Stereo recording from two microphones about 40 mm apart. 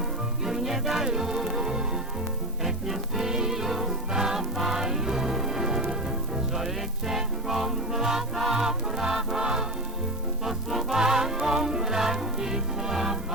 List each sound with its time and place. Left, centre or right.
0.4 s music: centre
10.4 s music: centre